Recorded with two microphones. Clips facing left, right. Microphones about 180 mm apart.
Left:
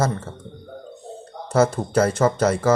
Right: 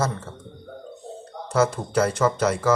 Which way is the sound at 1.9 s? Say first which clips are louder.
Left 2 dB; 50° left (ahead or behind).